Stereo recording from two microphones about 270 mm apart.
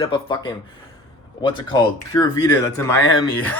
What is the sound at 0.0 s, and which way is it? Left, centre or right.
Speech, centre.